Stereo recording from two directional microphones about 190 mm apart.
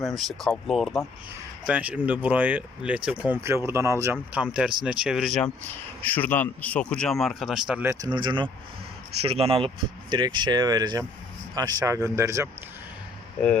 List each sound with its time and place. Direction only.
0.2 s speech: centre (ahead or behind)
8.1 s speech: 25° right (ahead or behind)